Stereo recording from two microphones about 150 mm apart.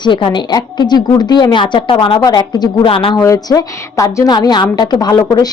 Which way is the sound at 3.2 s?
20° left (ahead or behind).